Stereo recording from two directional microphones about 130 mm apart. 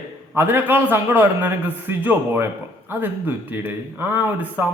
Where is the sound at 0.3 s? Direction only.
15° right (ahead or behind).